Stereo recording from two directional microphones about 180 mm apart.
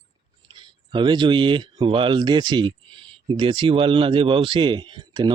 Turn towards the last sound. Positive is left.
turn(degrees=-25)  # may be behind; listen again after turning